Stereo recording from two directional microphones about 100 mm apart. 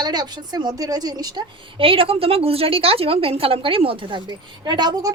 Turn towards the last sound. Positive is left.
turn(degrees=-45)  # may be behind; listen again after turning